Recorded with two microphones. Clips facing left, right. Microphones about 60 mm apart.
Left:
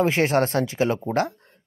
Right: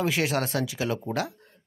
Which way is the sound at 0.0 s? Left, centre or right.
Left.